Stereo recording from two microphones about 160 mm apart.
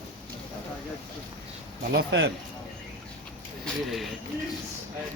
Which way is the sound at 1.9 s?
90° right.